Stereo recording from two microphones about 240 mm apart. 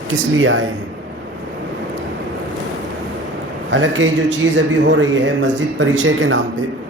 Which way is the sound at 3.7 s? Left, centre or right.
Right.